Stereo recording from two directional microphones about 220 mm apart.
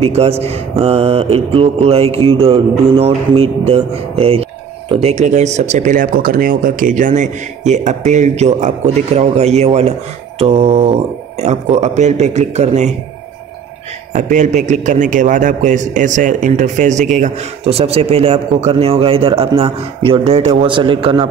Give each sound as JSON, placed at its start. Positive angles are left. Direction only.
{"t": 0.0, "sound": "a man's voice", "side_deg": -30}
{"t": 14.1, "sound": "a man's voice", "side_deg": -35}